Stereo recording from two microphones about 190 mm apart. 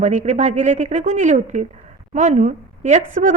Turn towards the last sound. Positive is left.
turn(degrees=-45)  # may be behind; listen again after turning